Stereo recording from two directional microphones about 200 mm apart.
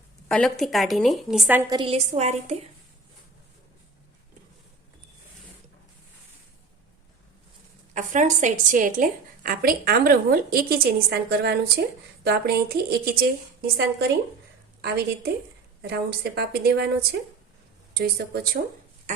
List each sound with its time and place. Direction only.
0.3 s a woman's voice: 5° left (ahead or behind)
1.7 s a woman's voice: 25° right (ahead or behind)
7.9 s a woman's voice: 40° right (ahead or behind)